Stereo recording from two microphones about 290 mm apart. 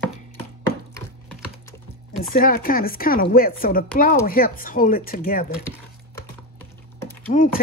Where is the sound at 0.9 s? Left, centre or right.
Centre.